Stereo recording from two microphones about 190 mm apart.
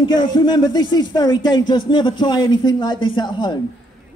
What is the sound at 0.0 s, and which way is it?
A man's voice, 25° left (ahead or behind).